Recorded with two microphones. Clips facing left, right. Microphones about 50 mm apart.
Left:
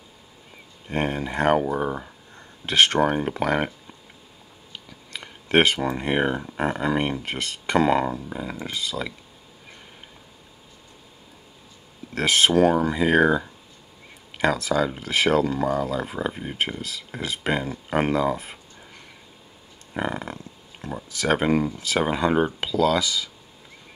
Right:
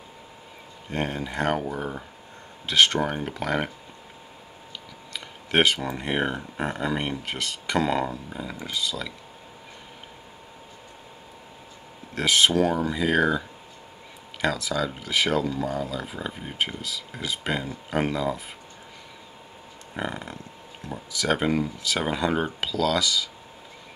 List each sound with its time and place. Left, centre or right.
0.8 s speech: left
2.6 s speech: left
3.1 s speech: left
5.1 s speech: left
8.3 s speech: centre
8.5 s speech: left
12.2 s speech: left
12.9 s speech: left
14.4 s speech: left
16.3 s speech: centre
16.5 s speech: left
20.0 s speech: left
20.8 s speech: left
22.1 s speech: centre